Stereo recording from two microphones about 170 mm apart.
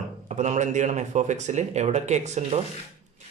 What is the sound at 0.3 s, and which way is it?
Speech, 45° right (ahead or behind).